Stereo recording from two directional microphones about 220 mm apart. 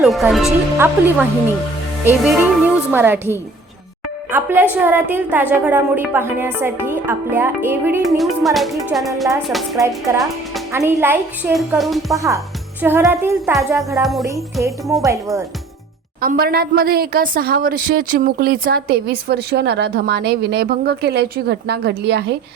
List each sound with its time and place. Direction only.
0.0 s a woman's voice: centre (ahead or behind)
4.3 s a woman's voice: 10° right (ahead or behind)
10.7 s a woman's voice: 10° right (ahead or behind)
12.1 s a woman's voice: 15° right (ahead or behind)
13.4 s a woman's voice: centre (ahead or behind)
15.0 s a woman's voice: 15° right (ahead or behind)
16.2 s speech: 40° right (ahead or behind)